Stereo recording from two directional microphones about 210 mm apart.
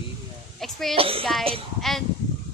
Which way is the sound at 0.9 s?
25° right (ahead or behind).